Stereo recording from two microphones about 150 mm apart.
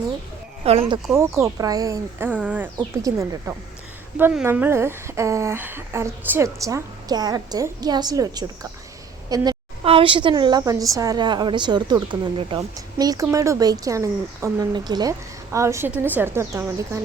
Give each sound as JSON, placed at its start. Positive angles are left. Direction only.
{"t": 0.6, "sound": "speech", "side_deg": -40}
{"t": 1.1, "sound": "speech", "side_deg": -20}
{"t": 2.7, "sound": "a woman's voice", "side_deg": -20}
{"t": 4.2, "sound": "a woman's voice", "side_deg": -5}
{"t": 9.8, "sound": "a woman's voice", "side_deg": -35}